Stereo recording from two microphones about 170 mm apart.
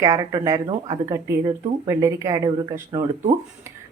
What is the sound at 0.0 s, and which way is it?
Speech, 20° right (ahead or behind).